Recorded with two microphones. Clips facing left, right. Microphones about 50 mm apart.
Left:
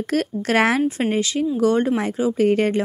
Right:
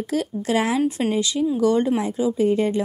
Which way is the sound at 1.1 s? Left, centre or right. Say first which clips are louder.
Even; left.